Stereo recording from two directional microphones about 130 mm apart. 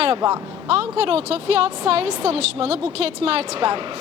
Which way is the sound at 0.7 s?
50° right (ahead or behind).